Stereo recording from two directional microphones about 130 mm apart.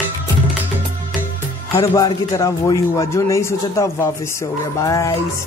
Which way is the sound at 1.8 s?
25° left (ahead or behind).